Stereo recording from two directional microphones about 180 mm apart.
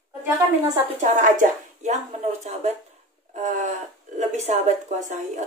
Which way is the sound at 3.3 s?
40° right (ahead or behind).